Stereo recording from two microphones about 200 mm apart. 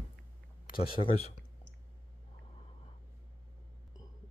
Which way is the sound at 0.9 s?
30° left (ahead or behind).